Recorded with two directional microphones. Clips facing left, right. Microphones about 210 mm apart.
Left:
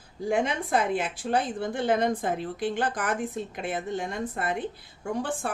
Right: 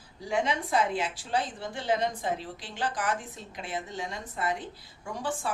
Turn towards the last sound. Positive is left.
turn(degrees=55)  # may be behind; listen again after turning